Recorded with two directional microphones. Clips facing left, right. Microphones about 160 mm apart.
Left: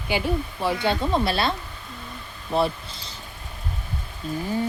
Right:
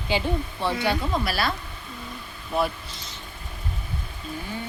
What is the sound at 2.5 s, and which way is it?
Speech, 30° left (ahead or behind).